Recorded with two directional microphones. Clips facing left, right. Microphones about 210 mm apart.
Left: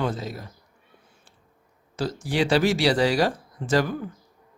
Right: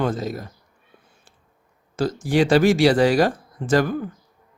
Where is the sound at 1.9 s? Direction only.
50° right (ahead or behind).